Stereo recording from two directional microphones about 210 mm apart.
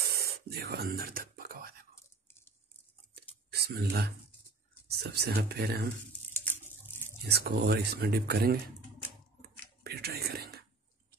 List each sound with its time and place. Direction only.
0.0 s a sound: 45° right (ahead or behind)
3.5 s speech: 50° right (ahead or behind)
7.2 s speech: 50° right (ahead or behind)
9.8 s whispering: 50° right (ahead or behind)